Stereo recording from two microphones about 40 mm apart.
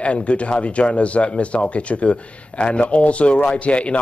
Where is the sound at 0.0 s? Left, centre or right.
Left.